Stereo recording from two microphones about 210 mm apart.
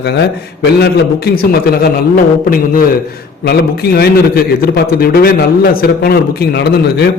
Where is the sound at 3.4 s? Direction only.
50° left (ahead or behind).